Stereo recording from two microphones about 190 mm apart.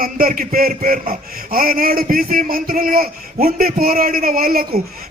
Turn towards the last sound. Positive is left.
turn(degrees=-50)  # may be behind; listen again after turning